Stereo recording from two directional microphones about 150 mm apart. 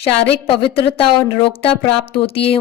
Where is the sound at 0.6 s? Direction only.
40° left (ahead or behind).